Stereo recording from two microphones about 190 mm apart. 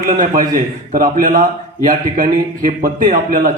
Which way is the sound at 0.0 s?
45° right (ahead or behind).